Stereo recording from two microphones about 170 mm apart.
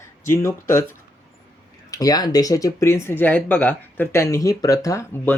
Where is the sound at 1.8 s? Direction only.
20° left (ahead or behind).